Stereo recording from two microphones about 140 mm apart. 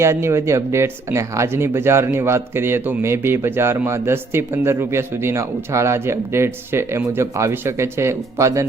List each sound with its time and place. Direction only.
0.0 s speech: 20° right (ahead or behind)